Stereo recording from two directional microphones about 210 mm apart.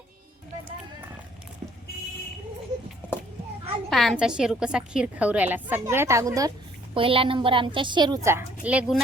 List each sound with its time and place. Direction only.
3.8 s a woman's voice: centre (ahead or behind)